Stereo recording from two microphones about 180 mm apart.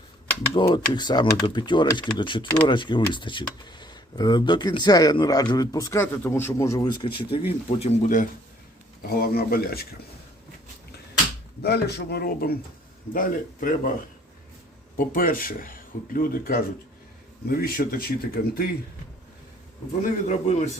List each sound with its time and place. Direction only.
0.5 s speech: 25° left (ahead or behind)
7.8 s speech: 40° left (ahead or behind)
9.2 s speech: 55° left (ahead or behind)
11.6 s speech: 65° left (ahead or behind)
14.9 s speech: 50° left (ahead or behind)
20.0 s speech: 45° left (ahead or behind)